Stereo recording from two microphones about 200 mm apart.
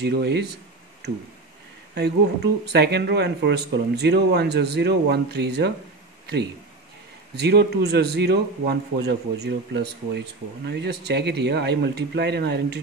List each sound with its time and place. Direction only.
0.0 s a man's voice: 55° right (ahead or behind)
2.0 s a man's voice: 55° right (ahead or behind)
7.3 s a man's voice: 55° right (ahead or behind)